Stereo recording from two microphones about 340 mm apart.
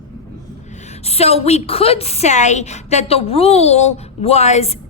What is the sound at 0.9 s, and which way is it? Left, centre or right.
A woman's voice, centre.